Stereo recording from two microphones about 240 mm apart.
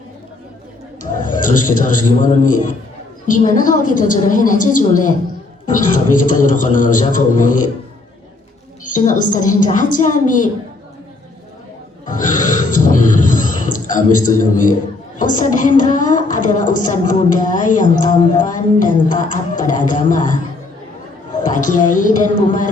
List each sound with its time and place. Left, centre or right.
1.1 s a man's voice: left
8.8 s speech: left
12.0 s a sound: left
15.2 s speech: left
21.4 s speech: left